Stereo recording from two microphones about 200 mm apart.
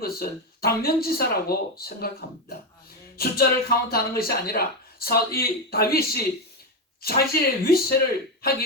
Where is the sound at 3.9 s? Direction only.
50° left (ahead or behind).